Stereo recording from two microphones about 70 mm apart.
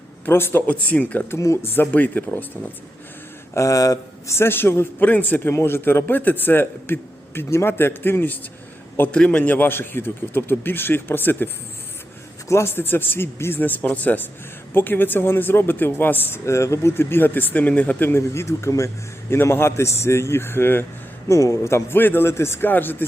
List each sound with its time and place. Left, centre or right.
0.3 s a man's voice: left
0.7 s speech: left
1.3 s a man's voice: left
3.5 s speech: left
4.4 s a man's voice: left
9.1 s a man's voice: centre
16.5 s a man's voice: left
18.1 s a man's voice: left
21.2 s a man's voice: left